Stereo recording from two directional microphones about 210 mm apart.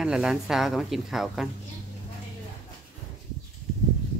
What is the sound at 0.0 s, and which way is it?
A woman's voice, 5° right (ahead or behind).